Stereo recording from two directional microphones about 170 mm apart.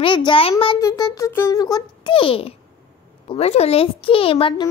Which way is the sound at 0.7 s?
20° left (ahead or behind).